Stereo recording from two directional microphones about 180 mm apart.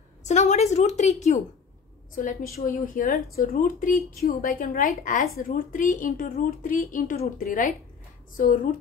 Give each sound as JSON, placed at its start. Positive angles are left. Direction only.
{"t": 0.2, "sound": "a woman's voice", "side_deg": 40}